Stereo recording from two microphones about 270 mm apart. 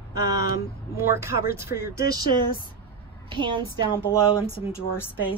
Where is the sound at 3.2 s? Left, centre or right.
Centre.